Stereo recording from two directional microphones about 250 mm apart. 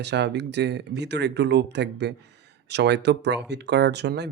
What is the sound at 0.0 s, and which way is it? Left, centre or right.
Speech, right.